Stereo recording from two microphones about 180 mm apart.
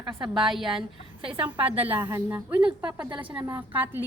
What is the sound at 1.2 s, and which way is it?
Speech, 30° right (ahead or behind).